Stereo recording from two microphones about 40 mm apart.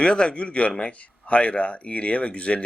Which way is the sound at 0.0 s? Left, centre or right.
Left.